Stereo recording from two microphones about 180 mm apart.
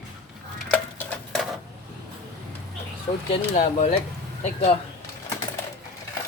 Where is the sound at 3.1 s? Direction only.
25° left (ahead or behind).